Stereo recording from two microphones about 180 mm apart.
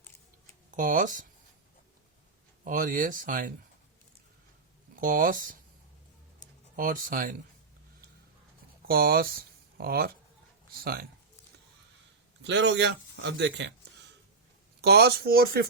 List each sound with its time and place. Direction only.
0.7 s speech: 45° right (ahead or behind)
2.6 s speech: 50° right (ahead or behind)
4.9 s speech: 50° right (ahead or behind)
6.7 s speech: 50° right (ahead or behind)
8.9 s speech: 55° right (ahead or behind)
12.4 s a man's voice: 75° right (ahead or behind)
14.8 s speech: 65° right (ahead or behind)